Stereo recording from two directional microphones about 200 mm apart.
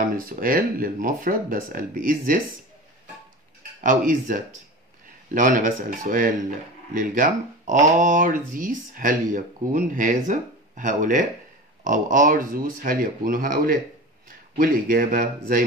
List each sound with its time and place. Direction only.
0.0 s speech: 45° right (ahead or behind)
3.8 s speech: 40° right (ahead or behind)